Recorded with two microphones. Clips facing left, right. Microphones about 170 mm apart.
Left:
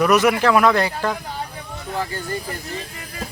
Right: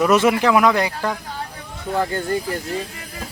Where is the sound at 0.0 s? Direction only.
25° right (ahead or behind).